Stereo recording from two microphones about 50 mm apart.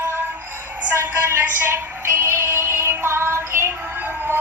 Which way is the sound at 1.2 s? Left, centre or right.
Right.